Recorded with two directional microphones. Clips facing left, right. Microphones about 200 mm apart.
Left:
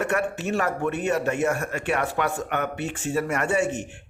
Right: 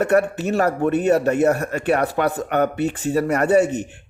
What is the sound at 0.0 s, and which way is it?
A man's voice, 40° right (ahead or behind).